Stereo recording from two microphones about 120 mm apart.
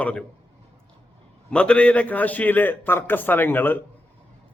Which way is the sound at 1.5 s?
10° left (ahead or behind).